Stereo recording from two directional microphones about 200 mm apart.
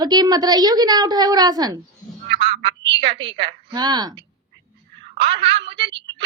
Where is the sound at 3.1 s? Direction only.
25° right (ahead or behind).